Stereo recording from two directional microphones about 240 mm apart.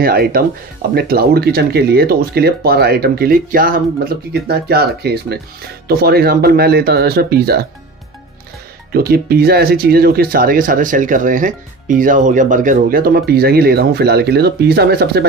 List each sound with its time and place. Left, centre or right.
0.0 s speech: right
8.9 s speech: right